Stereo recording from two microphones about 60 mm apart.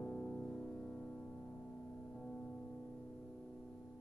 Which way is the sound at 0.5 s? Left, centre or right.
Centre.